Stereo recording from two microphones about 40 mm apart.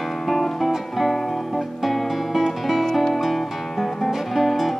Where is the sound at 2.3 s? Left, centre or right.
Centre.